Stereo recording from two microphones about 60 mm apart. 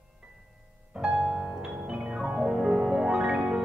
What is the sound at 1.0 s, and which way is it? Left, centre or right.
Music, centre.